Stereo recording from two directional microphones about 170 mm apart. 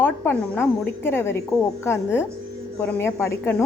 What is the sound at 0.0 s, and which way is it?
Speech, 10° left (ahead or behind).